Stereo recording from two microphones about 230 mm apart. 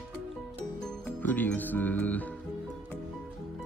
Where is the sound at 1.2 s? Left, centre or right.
Centre.